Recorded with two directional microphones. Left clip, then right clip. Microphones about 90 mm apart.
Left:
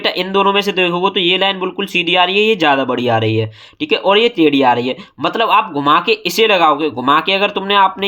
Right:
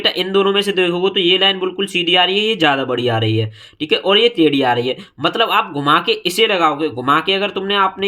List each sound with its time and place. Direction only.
0.0 s speech: 25° left (ahead or behind)